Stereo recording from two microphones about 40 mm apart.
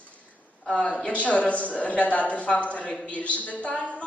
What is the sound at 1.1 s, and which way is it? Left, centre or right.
A woman's voice, left.